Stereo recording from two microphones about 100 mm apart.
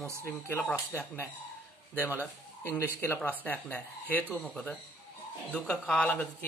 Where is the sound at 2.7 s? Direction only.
20° left (ahead or behind).